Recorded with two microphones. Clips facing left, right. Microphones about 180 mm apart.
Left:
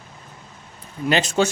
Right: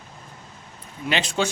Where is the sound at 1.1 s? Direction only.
45° left (ahead or behind).